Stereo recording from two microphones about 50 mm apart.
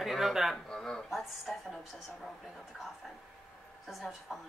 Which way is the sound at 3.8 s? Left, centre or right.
Centre.